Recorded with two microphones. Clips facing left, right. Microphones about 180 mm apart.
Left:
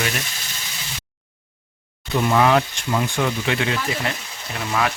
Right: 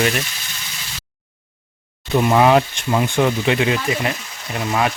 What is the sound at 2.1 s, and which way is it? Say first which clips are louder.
Speech: right 3 dB; 25° right (ahead or behind).